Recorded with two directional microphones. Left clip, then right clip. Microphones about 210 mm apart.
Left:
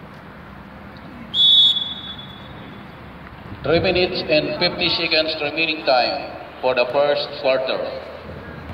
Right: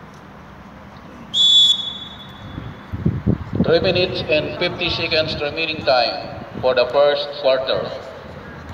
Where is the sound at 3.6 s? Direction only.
30° right (ahead or behind).